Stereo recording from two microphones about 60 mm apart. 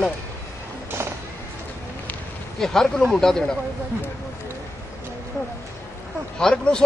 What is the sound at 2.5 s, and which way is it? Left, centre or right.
Speech, centre.